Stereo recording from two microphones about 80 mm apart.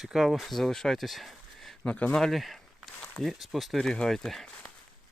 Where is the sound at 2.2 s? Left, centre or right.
Centre.